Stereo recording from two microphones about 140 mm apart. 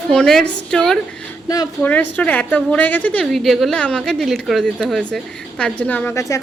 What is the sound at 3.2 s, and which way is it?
Speech, centre (ahead or behind).